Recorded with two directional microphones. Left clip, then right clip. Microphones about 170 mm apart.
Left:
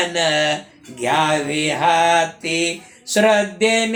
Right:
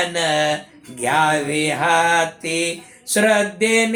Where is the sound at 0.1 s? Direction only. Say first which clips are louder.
Left 1 dB; 20° right (ahead or behind).